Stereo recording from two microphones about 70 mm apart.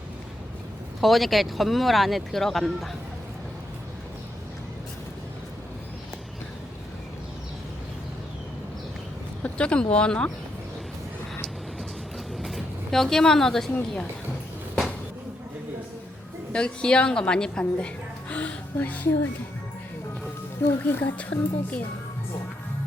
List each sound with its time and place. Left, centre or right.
1.0 s speech: centre
9.4 s speech: centre
12.4 s vehicle: centre
16.5 s a woman's voice: centre
20.6 s speech: left